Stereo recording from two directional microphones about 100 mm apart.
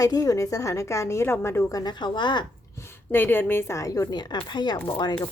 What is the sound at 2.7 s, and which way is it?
A woman's voice, 25° left (ahead or behind).